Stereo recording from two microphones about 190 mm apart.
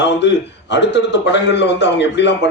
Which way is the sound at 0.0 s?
65° left (ahead or behind).